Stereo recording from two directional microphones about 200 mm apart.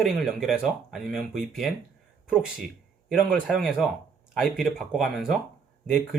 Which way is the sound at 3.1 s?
Centre (ahead or behind).